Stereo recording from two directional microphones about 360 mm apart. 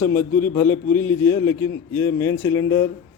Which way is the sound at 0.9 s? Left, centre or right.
Centre.